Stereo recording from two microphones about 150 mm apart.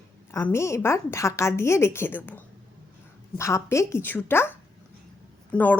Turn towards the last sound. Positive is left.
turn(degrees=10)  # may be behind; listen again after turning